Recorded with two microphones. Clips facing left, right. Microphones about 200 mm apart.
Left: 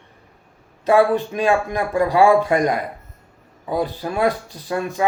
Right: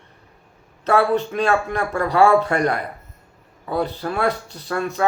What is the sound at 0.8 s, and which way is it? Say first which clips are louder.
Speech: left 2 dB; 15° left (ahead or behind).